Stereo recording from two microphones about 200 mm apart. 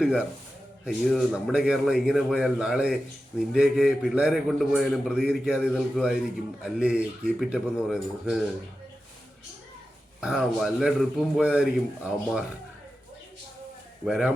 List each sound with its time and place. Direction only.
0.0 s a man's voice: 5° right (ahead or behind)
10.2 s a man's voice: 5° right (ahead or behind)
14.0 s a man's voice: centre (ahead or behind)